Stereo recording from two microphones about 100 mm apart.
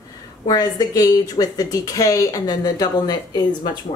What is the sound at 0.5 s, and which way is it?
A woman's voice, 40° left (ahead or behind).